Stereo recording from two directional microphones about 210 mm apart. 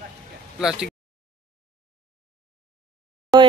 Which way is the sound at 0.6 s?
5° right (ahead or behind).